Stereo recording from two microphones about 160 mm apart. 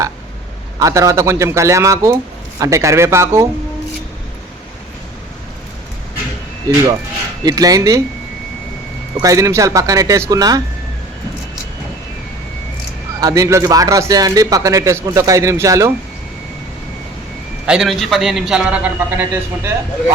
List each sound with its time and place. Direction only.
0.8 s a man's voice: 20° right (ahead or behind)
6.7 s a man's voice: 25° right (ahead or behind)
9.1 s a man's voice: 20° right (ahead or behind)
13.1 s a man's voice: 20° right (ahead or behind)
17.7 s a man's voice: centre (ahead or behind)